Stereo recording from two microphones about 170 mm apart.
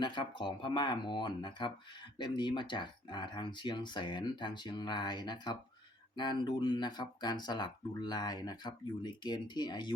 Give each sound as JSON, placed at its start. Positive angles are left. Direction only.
{"t": 0.0, "sound": "speech", "side_deg": 30}